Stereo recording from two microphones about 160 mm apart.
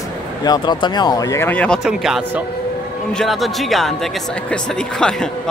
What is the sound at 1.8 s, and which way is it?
A man's voice, 5° right (ahead or behind).